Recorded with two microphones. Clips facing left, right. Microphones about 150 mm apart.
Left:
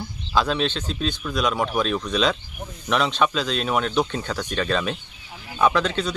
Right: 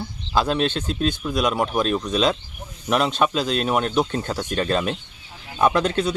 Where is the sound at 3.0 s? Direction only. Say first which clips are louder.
Right 1 dB; 45° right (ahead or behind).